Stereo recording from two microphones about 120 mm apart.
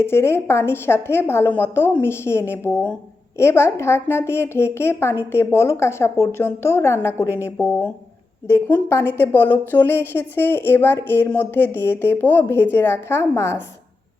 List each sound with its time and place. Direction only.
0.0 s a woman's voice: 20° left (ahead or behind)